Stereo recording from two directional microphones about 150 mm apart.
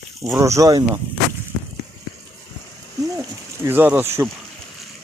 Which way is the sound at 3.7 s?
10° right (ahead or behind).